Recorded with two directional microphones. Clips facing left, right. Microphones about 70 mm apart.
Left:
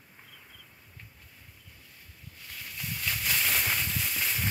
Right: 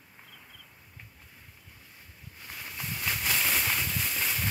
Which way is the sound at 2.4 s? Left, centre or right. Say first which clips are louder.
Right 2 dB; right.